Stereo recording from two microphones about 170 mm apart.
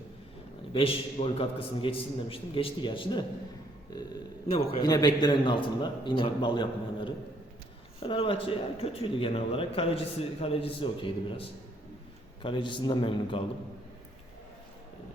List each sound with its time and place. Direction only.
0.7 s a man's voice: 35° left (ahead or behind)
3.9 s a sound: 25° left (ahead or behind)
4.5 s a man's voice: 25° left (ahead or behind)